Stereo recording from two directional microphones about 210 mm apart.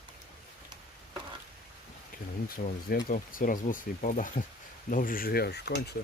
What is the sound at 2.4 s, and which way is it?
Speech, 45° left (ahead or behind).